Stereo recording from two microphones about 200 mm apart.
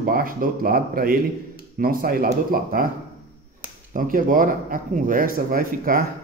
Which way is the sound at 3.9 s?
40° right (ahead or behind).